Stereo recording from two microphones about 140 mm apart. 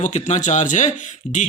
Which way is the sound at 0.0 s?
60° left (ahead or behind).